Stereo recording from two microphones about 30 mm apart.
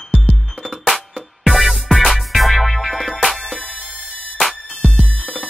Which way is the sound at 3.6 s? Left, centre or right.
Right.